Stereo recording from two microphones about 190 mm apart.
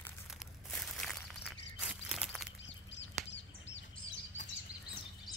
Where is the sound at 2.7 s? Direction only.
70° left (ahead or behind).